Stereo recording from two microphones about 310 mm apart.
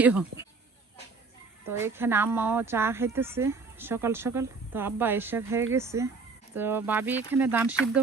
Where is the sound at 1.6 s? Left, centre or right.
Centre.